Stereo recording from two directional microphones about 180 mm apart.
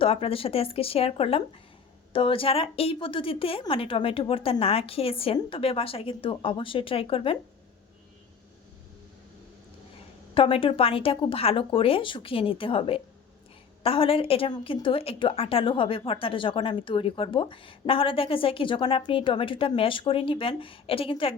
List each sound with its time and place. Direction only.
0.0 s a woman's voice: 30° left (ahead or behind)
10.3 s a woman's voice: 30° left (ahead or behind)